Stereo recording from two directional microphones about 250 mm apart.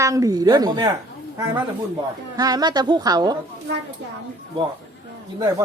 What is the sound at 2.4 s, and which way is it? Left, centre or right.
Speech, centre.